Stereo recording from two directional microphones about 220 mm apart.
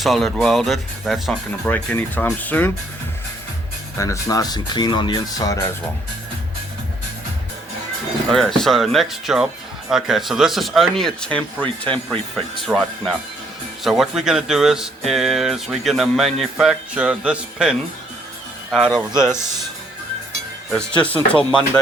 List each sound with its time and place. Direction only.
0.0 s speech: centre (ahead or behind)
3.9 s speech: 15° left (ahead or behind)
8.3 s speech: centre (ahead or behind)
21.0 s speech: 5° left (ahead or behind)